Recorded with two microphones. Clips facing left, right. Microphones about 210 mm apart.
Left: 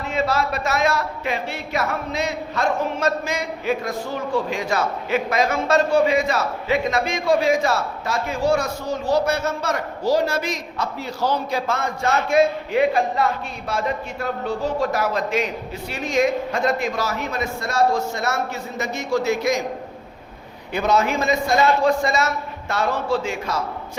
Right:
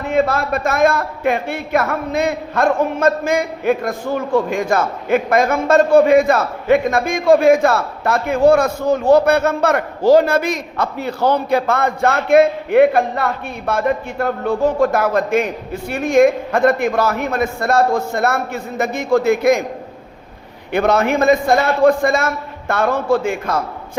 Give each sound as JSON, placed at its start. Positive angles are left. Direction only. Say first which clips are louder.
{"t": 0.0, "sound": "a man's voice", "louder": "right 5 dB", "side_deg": -55}
{"t": 20.7, "sound": "a man's voice", "louder": "right 5 dB", "side_deg": -55}